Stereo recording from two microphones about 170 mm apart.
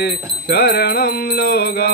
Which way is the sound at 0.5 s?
65° left (ahead or behind).